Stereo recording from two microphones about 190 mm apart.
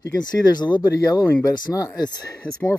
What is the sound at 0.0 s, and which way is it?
Speech, 20° left (ahead or behind).